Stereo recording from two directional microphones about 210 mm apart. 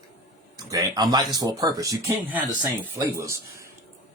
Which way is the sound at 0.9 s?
20° right (ahead or behind).